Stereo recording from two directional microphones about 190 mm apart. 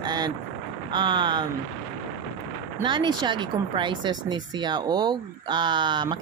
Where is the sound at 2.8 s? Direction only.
25° right (ahead or behind).